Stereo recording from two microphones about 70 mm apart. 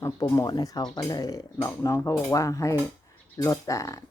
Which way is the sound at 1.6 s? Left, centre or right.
Left.